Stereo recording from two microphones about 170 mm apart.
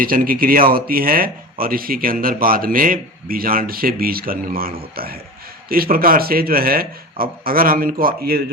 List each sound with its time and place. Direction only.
0.0 s speech: 55° right (ahead or behind)